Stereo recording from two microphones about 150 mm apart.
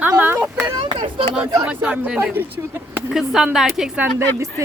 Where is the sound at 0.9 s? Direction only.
35° right (ahead or behind).